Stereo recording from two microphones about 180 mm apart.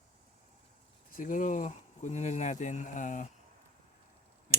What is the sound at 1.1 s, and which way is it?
Speech, 45° left (ahead or behind).